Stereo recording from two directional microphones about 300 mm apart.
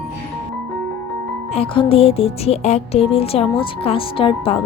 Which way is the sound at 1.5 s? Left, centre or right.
Centre.